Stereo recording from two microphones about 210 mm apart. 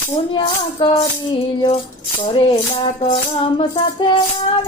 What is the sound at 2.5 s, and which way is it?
Music, 25° left (ahead or behind).